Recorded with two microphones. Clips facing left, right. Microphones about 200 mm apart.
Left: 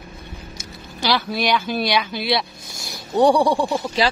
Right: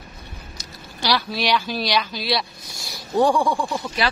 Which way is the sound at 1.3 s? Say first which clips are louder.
Left 2 dB; 55° left (ahead or behind).